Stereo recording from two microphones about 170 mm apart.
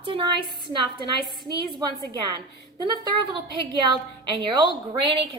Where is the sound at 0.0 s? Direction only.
30° right (ahead or behind).